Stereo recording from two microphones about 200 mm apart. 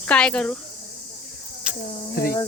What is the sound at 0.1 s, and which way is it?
Speech, 5° left (ahead or behind).